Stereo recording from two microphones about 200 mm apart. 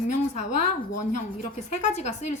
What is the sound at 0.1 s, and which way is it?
A woman's voice, 35° left (ahead or behind).